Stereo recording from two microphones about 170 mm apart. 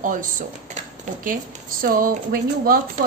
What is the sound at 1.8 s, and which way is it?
Speech, 55° right (ahead or behind).